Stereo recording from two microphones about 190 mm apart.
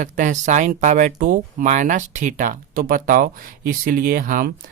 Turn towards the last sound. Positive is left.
turn(degrees=-45)  # may be behind; listen again after turning